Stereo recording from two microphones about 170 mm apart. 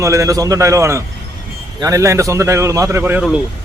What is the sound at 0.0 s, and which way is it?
Speech, 20° right (ahead or behind).